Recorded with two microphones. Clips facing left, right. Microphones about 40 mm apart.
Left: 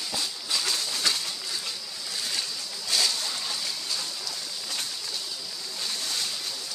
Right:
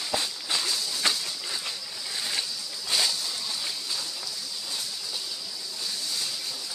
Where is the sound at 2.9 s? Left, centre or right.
Right.